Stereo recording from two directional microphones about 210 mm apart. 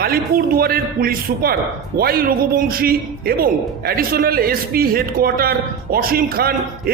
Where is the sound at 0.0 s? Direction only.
45° right (ahead or behind).